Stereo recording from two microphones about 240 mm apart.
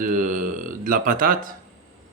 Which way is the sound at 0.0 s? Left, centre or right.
Right.